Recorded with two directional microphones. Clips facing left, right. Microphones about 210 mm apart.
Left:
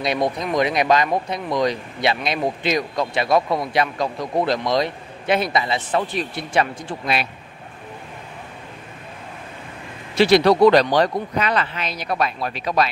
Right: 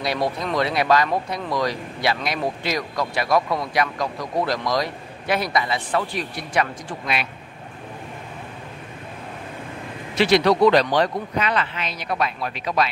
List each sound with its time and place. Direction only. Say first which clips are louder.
0.0 s speech: left 2 dB; 20° left (ahead or behind)
10.1 s speech: left 3 dB; 35° left (ahead or behind)